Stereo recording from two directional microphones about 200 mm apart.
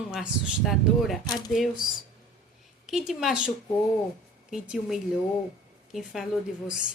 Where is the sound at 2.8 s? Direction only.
Centre (ahead or behind).